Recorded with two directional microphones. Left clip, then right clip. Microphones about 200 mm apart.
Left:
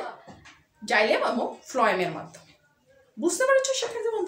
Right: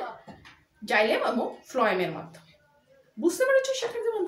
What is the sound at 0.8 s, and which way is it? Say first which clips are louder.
A woman's voice: left 1 dB; 5° left (ahead or behind).